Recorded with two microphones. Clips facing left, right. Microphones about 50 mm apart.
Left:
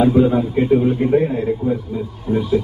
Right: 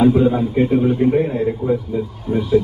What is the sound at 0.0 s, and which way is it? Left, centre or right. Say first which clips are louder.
Speech: even; centre.